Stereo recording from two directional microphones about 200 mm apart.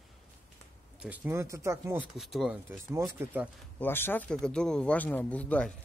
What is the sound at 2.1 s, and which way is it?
Speech, centre (ahead or behind).